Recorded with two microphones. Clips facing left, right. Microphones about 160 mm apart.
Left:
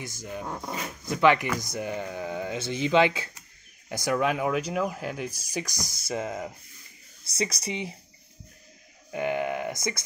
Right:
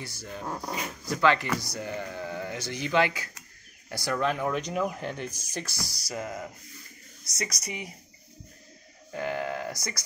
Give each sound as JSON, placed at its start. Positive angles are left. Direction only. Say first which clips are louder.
{"t": 0.0, "sound": "speech", "louder": "left 2 dB", "side_deg": 15}
{"t": 9.1, "sound": "speech", "louder": "left 3 dB", "side_deg": 20}